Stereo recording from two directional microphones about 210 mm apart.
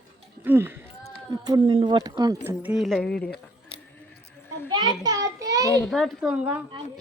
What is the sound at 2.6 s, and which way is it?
Speech, 5° right (ahead or behind).